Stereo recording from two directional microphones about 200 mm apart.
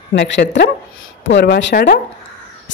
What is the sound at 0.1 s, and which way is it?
Speech, 60° left (ahead or behind).